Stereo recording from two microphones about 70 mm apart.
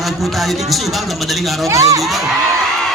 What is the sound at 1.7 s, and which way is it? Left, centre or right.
Speech, right.